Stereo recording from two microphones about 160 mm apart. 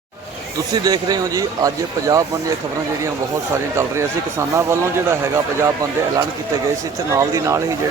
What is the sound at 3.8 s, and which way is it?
Speech, 15° right (ahead or behind).